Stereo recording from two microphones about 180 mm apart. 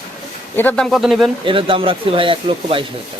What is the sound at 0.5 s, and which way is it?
Speech, 10° left (ahead or behind).